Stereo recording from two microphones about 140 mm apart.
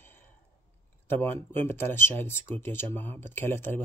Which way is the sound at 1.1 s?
15° left (ahead or behind).